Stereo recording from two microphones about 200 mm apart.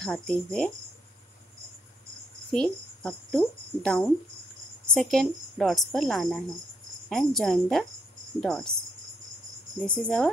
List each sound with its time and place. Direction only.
0.0 s a woman's voice: 5° left (ahead or behind)
2.5 s a woman's voice: 5° left (ahead or behind)
9.8 s a woman's voice: 5° left (ahead or behind)